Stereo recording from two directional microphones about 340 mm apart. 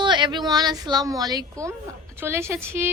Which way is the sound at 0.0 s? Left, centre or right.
Centre.